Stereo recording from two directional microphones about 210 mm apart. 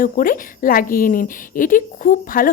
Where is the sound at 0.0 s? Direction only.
40° left (ahead or behind).